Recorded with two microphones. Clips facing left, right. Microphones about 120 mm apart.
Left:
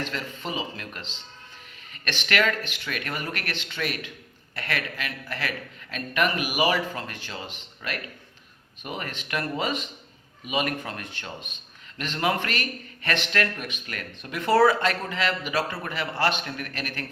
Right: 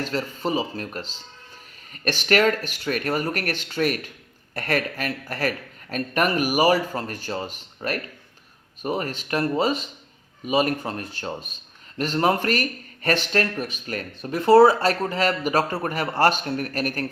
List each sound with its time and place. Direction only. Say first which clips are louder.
0.0 s speech: right 6 dB; 35° right (ahead or behind)